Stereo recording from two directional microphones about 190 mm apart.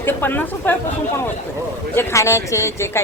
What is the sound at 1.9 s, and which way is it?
Speech, 15° left (ahead or behind).